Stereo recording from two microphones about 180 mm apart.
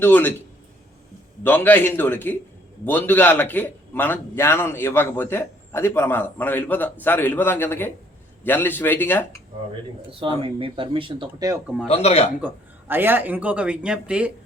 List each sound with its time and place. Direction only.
0.0 s a man's voice: 10° left (ahead or behind)
1.5 s a man's voice: 10° left (ahead or behind)
10.1 s speech: 30° right (ahead or behind)
11.9 s speech: 35° left (ahead or behind)
12.9 s speech: 10° right (ahead or behind)